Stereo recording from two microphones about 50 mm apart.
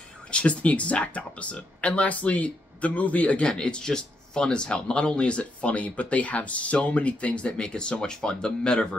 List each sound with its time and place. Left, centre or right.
0.3 s speech: left